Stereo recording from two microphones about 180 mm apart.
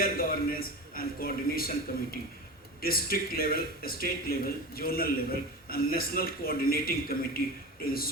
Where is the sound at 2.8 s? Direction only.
55° left (ahead or behind).